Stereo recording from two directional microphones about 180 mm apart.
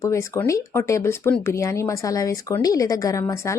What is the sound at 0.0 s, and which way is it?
Speech, 15° left (ahead or behind).